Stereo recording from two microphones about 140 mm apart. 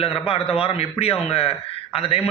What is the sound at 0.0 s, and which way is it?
A man's voice, 40° left (ahead or behind).